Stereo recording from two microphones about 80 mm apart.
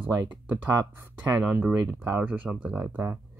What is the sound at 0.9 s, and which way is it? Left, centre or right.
Speech, right.